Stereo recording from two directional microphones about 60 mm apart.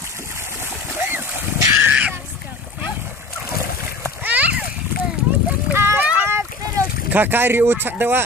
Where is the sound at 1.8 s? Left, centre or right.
Right.